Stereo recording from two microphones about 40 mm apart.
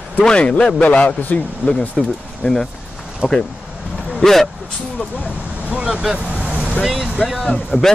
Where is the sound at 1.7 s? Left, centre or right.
Centre.